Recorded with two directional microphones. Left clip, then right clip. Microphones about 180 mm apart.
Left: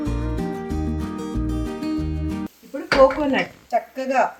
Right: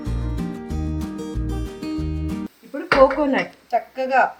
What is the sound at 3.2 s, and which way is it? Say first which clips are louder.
Speech: right 1 dB; 20° left (ahead or behind).